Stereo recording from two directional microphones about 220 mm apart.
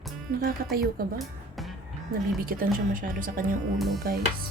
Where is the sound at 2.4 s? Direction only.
40° right (ahead or behind).